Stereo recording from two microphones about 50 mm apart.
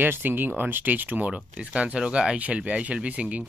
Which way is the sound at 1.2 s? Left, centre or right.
Right.